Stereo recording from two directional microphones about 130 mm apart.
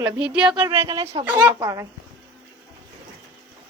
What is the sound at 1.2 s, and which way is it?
Speech, 15° right (ahead or behind).